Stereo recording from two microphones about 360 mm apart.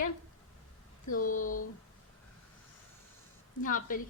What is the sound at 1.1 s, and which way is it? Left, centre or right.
Speech, left.